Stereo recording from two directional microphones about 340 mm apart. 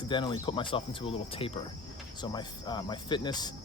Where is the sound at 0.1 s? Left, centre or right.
Centre.